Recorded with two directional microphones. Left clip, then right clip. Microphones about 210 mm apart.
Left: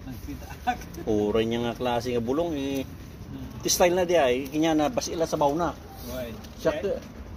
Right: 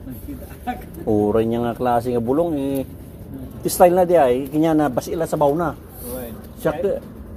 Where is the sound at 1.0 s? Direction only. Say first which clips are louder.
Right 6 dB; 5° right (ahead or behind).